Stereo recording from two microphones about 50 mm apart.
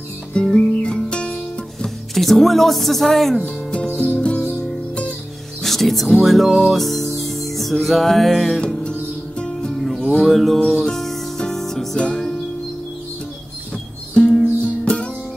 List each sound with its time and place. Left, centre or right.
0.3 s music: centre
1.3 s music: centre
3.9 s music: left
5.6 s music: centre
9.7 s music: centre
14.1 s music: centre